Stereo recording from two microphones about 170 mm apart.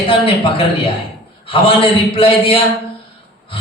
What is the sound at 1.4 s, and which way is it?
A man's voice, 30° left (ahead or behind).